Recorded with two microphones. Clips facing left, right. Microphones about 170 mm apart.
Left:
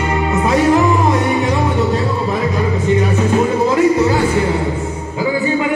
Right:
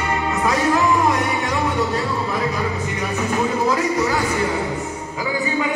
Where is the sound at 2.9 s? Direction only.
20° left (ahead or behind).